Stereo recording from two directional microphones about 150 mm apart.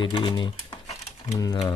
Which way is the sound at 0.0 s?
35° left (ahead or behind).